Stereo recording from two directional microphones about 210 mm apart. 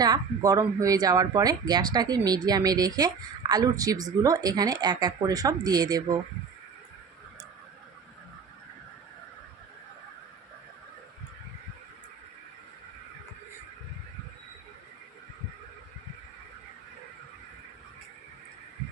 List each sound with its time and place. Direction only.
0.0 s speech: 15° right (ahead or behind)